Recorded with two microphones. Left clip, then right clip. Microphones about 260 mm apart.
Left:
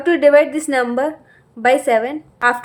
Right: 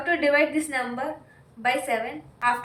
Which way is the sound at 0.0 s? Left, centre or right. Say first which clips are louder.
Left 10 dB; left.